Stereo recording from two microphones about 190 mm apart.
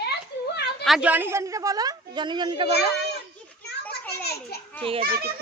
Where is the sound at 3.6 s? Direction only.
60° left (ahead or behind).